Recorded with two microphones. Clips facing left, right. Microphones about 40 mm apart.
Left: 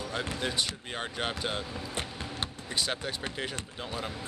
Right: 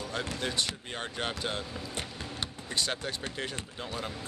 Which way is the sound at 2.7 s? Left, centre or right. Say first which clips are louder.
Even; centre.